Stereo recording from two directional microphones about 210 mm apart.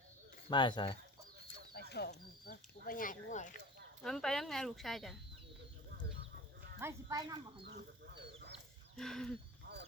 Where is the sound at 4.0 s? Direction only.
5° left (ahead or behind).